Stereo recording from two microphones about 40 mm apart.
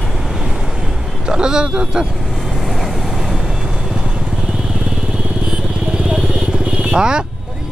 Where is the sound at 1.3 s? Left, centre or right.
Centre.